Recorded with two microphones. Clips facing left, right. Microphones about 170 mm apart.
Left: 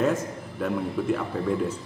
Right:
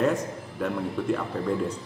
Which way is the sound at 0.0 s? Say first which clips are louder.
Even; centre (ahead or behind).